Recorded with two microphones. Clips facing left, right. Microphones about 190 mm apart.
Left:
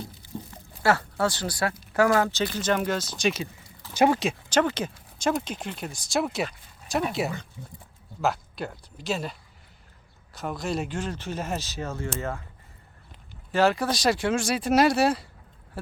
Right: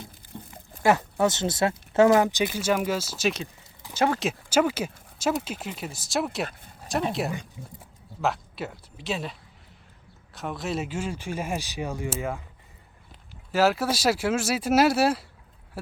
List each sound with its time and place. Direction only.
0.5 s speech: 15° right (ahead or behind)
3.9 s speech: 15° left (ahead or behind)
4.2 s speech: 5° right (ahead or behind)
7.6 s speech: 10° right (ahead or behind)
13.5 s speech: 5° right (ahead or behind)